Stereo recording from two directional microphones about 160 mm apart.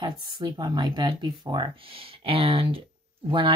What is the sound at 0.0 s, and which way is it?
Speech, 25° right (ahead or behind).